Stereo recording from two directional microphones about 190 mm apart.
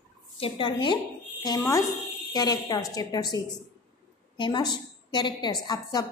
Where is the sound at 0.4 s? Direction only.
25° left (ahead or behind).